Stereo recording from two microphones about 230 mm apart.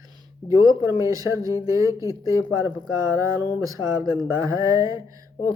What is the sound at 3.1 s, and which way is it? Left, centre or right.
Speech, centre.